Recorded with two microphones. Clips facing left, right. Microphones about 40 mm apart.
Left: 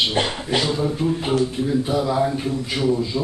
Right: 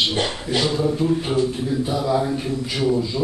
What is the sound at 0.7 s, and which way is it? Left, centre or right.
A man's voice, centre.